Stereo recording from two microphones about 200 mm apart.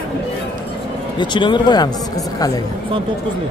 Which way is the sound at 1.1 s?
25° left (ahead or behind).